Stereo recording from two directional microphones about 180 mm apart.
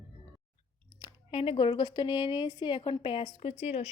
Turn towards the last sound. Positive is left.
turn(degrees=35)  # may be behind; listen again after turning